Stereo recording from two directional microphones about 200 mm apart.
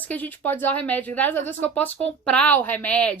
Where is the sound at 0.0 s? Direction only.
10° left (ahead or behind).